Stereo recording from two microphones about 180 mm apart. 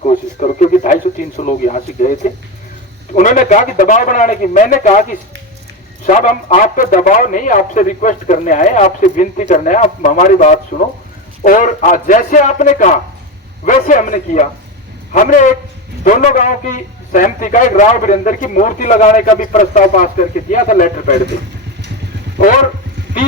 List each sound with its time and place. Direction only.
0.1 s radio: 45° left (ahead or behind)
1.4 s a man's voice: 45° left (ahead or behind)
3.2 s a man's voice: 45° left (ahead or behind)
6.6 s a man's voice: 50° left (ahead or behind)